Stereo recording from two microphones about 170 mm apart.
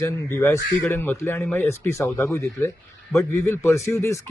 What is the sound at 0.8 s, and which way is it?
Speech, 15° left (ahead or behind).